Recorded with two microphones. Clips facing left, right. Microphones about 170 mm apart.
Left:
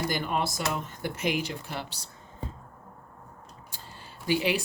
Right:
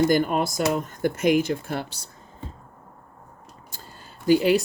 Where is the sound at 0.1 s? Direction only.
45° right (ahead or behind).